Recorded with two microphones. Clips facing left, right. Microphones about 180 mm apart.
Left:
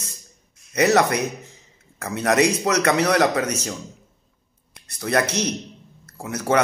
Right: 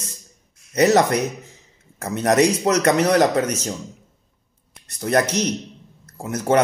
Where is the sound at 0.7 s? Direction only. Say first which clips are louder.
Right 2 dB; 40° right (ahead or behind).